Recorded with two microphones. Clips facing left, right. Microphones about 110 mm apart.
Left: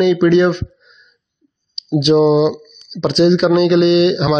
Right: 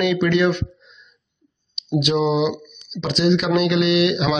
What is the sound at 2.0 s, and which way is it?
Speech, 30° left (ahead or behind).